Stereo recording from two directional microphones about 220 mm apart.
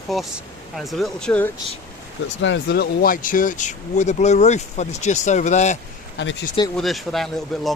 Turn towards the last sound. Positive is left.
turn(degrees=0)  # may be behind; listen again after turning